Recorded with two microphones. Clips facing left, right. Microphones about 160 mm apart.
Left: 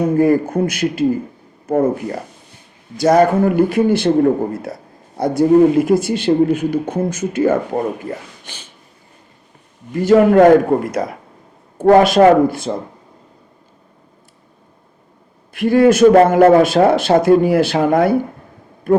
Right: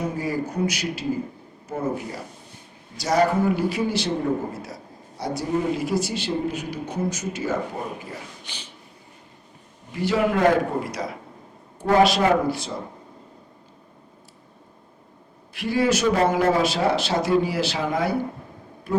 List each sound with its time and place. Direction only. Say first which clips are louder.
0.2 s speech: left 12 dB; 55° left (ahead or behind)
9.9 s speech: left 11 dB; 45° left (ahead or behind)
15.5 s speech: left 10 dB; 50° left (ahead or behind)